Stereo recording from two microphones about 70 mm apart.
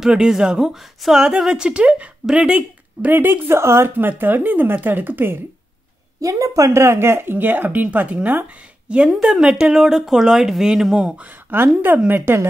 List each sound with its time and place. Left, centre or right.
0.0 s speech: centre
3.1 s speech: right
3.9 s speech: right
6.2 s speech: right
8.8 s speech: centre
11.5 s speech: right